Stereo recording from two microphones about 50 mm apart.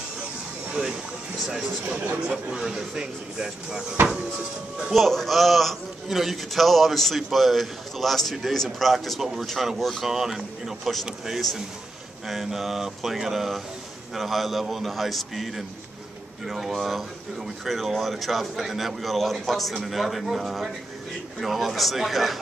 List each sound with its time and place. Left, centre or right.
2.2 s speech: centre
4.9 s speech: centre
10.0 s speech: centre